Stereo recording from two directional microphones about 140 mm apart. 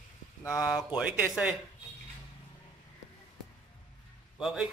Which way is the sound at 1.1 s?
5° right (ahead or behind).